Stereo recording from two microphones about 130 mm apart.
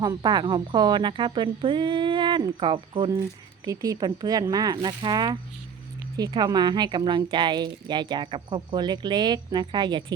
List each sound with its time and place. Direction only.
0.0 s speech: 30° right (ahead or behind)
3.6 s speech: 25° right (ahead or behind)